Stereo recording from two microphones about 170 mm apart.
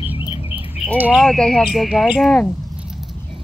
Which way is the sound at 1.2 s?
Centre (ahead or behind).